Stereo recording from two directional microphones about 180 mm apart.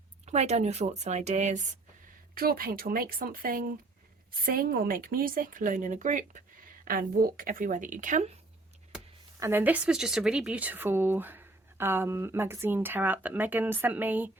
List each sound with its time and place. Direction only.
0.3 s speech: 40° right (ahead or behind)
2.3 s a woman's voice: 55° right (ahead or behind)
9.4 s speech: 10° right (ahead or behind)